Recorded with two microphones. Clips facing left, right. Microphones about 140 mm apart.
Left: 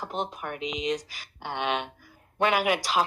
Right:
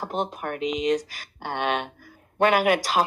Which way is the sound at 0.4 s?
45° right (ahead or behind).